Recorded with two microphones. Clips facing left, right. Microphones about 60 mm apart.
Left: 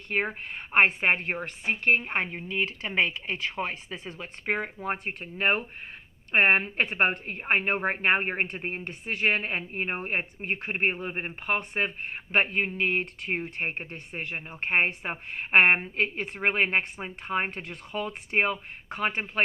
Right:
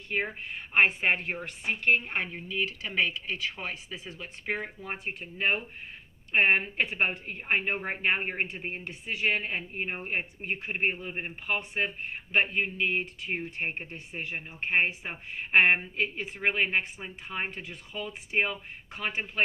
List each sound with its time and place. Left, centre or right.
0.1 s a woman's voice: left